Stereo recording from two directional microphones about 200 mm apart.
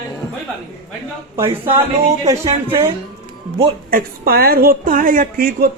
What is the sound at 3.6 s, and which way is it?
A woman's voice, 50° right (ahead or behind).